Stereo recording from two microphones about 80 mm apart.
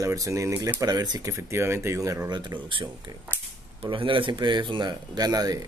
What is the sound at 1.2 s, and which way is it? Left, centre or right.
Speech, right.